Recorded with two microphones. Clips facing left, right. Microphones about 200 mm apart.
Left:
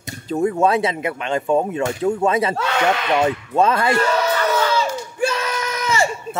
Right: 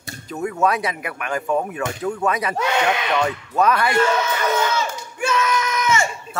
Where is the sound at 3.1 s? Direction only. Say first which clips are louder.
Left 3 dB; 25° left (ahead or behind).